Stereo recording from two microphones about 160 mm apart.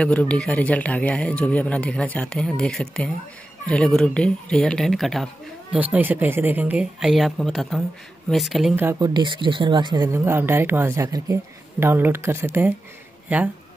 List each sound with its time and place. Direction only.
0.0 s speech: 5° left (ahead or behind)
5.8 s speech: 10° right (ahead or behind)
9.0 s speech: 30° right (ahead or behind)
10.0 s speech: 15° right (ahead or behind)